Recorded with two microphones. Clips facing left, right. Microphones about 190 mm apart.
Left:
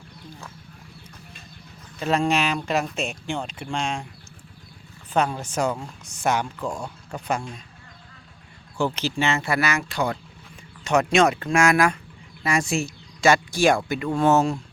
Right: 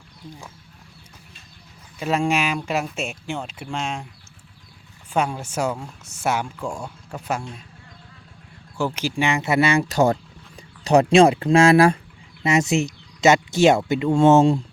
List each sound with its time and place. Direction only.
2.0 s speech: 10° right (ahead or behind)
5.1 s speech: 10° right (ahead or behind)
8.8 s speech: 10° right (ahead or behind); by 9.8 s 25° right (ahead or behind)
9.9 s speech: 45° right (ahead or behind)
10.8 s speech: 30° right (ahead or behind)